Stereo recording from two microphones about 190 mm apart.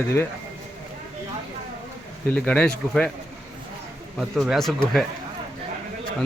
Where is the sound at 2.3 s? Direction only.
5° left (ahead or behind).